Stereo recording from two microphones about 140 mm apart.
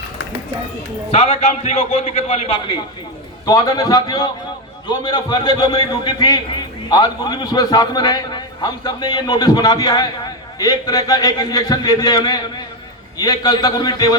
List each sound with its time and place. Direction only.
1.1 s a man's voice: 50° left (ahead or behind)
2.6 s a woman's voice: 35° left (ahead or behind)